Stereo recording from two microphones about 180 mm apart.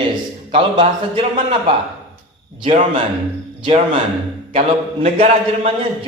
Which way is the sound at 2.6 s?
30° right (ahead or behind).